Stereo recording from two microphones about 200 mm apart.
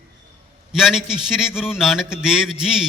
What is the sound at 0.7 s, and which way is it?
A man's voice, centre (ahead or behind).